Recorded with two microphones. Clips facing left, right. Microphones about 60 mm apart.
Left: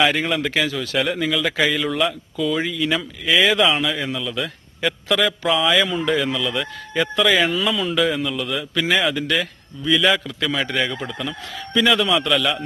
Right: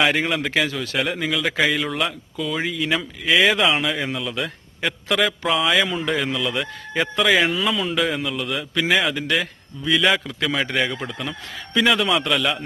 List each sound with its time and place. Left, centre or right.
0.0 s a man's voice: centre
4.1 s a man's voice: right